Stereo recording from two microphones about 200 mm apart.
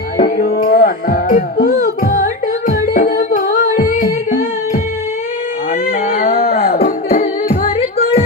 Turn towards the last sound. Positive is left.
turn(degrees=50)  # may be behind; listen again after turning